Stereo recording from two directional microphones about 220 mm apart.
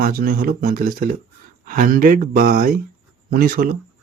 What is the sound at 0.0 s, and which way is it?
Speech, 40° right (ahead or behind).